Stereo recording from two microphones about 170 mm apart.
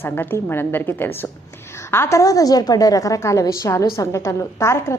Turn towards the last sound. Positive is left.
turn(degrees=15)  # may be behind; listen again after turning